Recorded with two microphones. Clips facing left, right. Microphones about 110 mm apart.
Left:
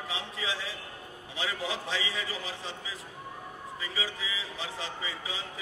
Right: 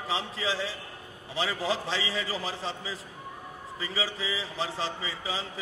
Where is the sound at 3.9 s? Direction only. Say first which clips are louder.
Right 5 dB; 35° right (ahead or behind).